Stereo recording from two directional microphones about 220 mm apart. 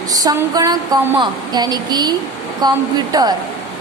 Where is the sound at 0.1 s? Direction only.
15° right (ahead or behind).